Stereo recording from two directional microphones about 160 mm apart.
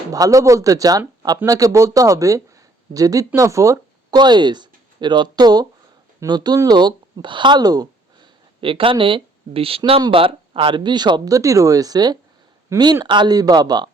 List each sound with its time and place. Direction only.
0.1 s speech: 20° right (ahead or behind)